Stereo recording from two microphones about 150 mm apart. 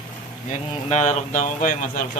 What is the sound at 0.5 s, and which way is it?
Speech, 50° left (ahead or behind).